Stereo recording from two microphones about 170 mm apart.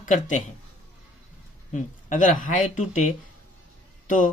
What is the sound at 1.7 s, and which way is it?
Speech, 50° left (ahead or behind).